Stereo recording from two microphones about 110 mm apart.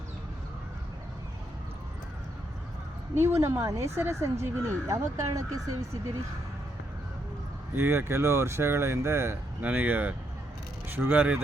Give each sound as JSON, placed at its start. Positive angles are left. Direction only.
{"t": 3.2, "sound": "speech", "side_deg": -25}
{"t": 7.8, "sound": "speech", "side_deg": -20}